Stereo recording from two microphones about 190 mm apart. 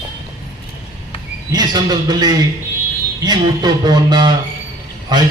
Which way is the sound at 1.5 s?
20° right (ahead or behind).